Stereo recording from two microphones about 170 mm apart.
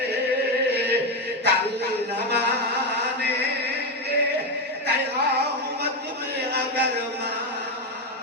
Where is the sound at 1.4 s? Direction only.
80° right.